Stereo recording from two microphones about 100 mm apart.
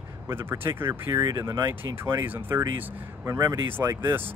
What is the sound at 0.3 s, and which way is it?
Speech, 25° right (ahead or behind).